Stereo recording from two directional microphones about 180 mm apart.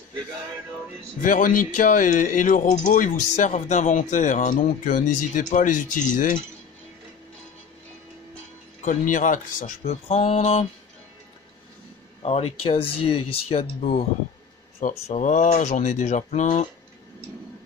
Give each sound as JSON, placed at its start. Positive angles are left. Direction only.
{"t": 1.2, "sound": "speech", "side_deg": 50}
{"t": 8.8, "sound": "speech", "side_deg": 45}
{"t": 12.2, "sound": "speech", "side_deg": 35}